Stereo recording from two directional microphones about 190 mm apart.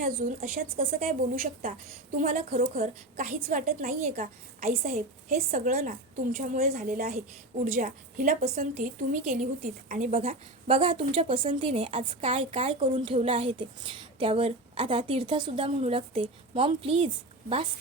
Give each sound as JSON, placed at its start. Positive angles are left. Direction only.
{"t": 0.6, "sound": "a woman's voice", "side_deg": -50}
{"t": 2.1, "sound": "a woman's voice", "side_deg": -40}
{"t": 3.7, "sound": "a woman's voice", "side_deg": -50}
{"t": 5.7, "sound": "a woman's voice", "side_deg": -40}